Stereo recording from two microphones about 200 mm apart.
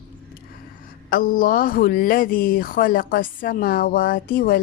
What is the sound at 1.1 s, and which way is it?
Speech, 45° left (ahead or behind).